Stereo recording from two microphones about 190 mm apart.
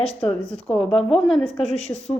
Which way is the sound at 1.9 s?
20° left (ahead or behind).